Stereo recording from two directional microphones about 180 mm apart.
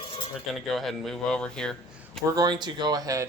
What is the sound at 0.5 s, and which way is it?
Speech, centre (ahead or behind).